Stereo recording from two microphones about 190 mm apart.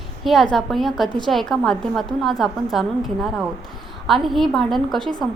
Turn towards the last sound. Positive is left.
turn(degrees=0)  # may be behind; listen again after turning